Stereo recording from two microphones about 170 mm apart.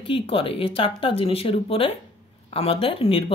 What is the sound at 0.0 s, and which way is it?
Speech, 30° left (ahead or behind).